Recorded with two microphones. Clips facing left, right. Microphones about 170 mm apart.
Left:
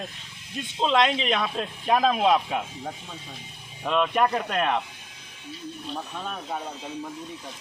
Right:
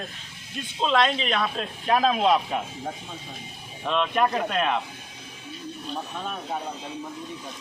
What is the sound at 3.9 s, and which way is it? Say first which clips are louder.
Speech: left 1 dB; 5° left (ahead or behind).